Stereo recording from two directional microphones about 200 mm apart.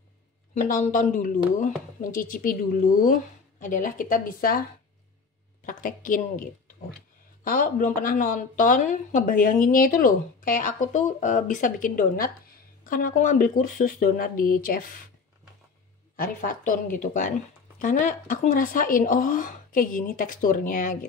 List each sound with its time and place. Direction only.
0.6 s speech: 40° left (ahead or behind)
5.7 s speech: 40° left (ahead or behind)
16.2 s speech: 40° left (ahead or behind)